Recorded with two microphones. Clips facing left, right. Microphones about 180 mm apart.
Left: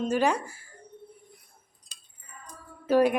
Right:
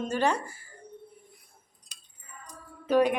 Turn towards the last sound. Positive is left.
turn(degrees=5)  # may be behind; listen again after turning